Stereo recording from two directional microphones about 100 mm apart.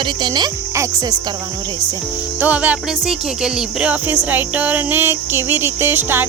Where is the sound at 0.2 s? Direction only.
50° right (ahead or behind).